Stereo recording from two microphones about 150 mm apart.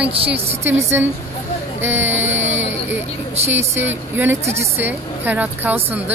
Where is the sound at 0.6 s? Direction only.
20° right (ahead or behind).